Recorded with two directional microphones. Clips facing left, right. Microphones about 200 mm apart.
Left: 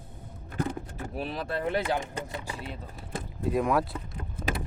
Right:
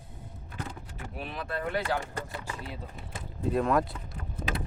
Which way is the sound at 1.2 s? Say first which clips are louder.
Left 3 dB; 35° left (ahead or behind).